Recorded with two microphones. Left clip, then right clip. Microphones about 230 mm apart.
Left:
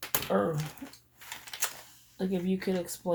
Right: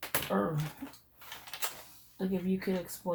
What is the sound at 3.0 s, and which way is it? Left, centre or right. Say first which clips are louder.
Speech: left 4 dB; left.